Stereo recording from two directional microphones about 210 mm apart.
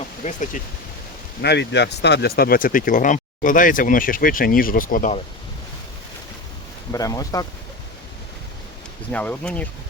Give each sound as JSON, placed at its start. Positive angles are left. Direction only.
{"t": 0.6, "sound": "speech", "side_deg": 40}
{"t": 1.4, "sound": "speech", "side_deg": 55}
{"t": 6.9, "sound": "speech", "side_deg": 15}
{"t": 9.1, "sound": "speech", "side_deg": 5}